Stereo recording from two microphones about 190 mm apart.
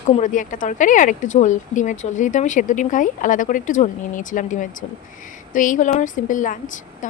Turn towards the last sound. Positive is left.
turn(degrees=45)  # may be behind; listen again after turning